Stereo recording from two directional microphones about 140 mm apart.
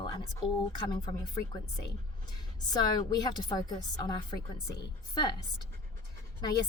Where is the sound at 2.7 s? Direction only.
30° left (ahead or behind).